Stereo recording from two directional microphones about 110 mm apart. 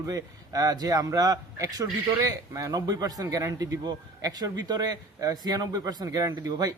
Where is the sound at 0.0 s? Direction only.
30° right (ahead or behind).